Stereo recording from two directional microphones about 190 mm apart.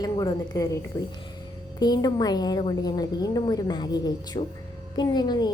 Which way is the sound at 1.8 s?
20° left (ahead or behind).